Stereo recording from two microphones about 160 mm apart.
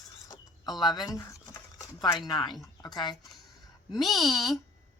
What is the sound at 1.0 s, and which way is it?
Speech, 20° left (ahead or behind).